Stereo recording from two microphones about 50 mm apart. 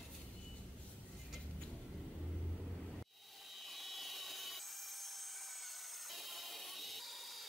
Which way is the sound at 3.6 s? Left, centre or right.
Centre.